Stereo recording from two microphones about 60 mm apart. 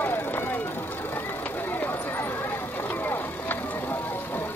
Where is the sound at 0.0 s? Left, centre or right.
Left.